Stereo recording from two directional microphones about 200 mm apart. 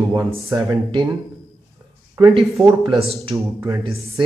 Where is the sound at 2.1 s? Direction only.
15° right (ahead or behind).